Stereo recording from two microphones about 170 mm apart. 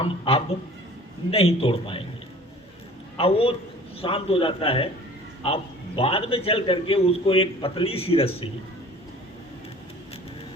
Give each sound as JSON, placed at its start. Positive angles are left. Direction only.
{"t": 0.0, "sound": "a man's voice", "side_deg": 35}
{"t": 3.2, "sound": "a man's voice", "side_deg": 35}
{"t": 6.0, "sound": "a man's voice", "side_deg": 35}